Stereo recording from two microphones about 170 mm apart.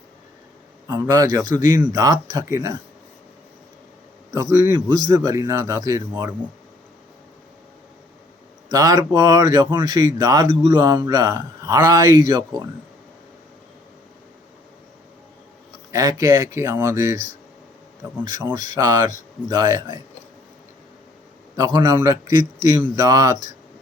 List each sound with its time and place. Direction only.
0.9 s speech: 20° right (ahead or behind)
4.3 s speech: 20° right (ahead or behind)
8.7 s speech: 20° right (ahead or behind)
15.9 s speech: 20° right (ahead or behind)
21.5 s speech: 20° right (ahead or behind)